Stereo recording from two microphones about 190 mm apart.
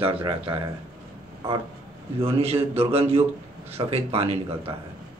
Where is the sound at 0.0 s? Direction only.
25° right (ahead or behind).